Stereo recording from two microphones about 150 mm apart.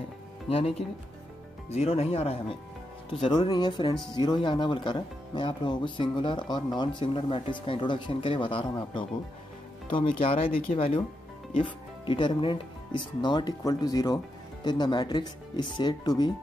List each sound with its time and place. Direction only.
0.5 s speech: 40° left (ahead or behind)